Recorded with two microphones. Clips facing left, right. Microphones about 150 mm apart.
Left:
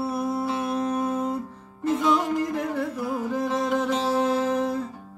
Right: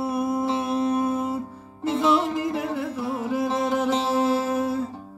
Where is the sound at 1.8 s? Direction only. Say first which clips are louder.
Right 1 dB; 30° right (ahead or behind).